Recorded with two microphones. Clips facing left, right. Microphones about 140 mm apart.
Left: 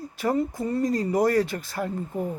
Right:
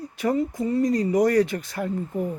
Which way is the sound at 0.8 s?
30° left (ahead or behind).